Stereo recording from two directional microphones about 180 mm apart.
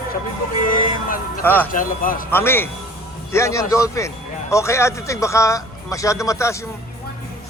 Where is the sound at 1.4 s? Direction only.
10° left (ahead or behind).